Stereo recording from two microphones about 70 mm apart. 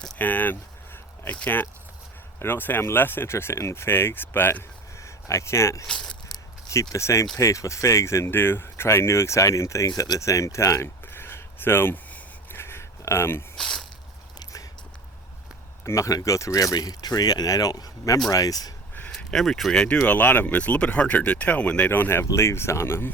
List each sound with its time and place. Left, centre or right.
0.2 s speech: left
4.9 s speech: left
5.9 s speech: centre
6.7 s speech: left
9.8 s speech: left
12.5 s a sound: left
13.6 s a sound: centre
14.3 s biting: left
15.8 s speech: left
19.1 s speech: centre
20.1 s speech: left
21.8 s speech: left
22.4 s speech: left